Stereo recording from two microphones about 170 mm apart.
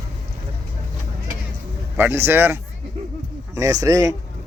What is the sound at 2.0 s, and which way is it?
Speech, 10° right (ahead or behind).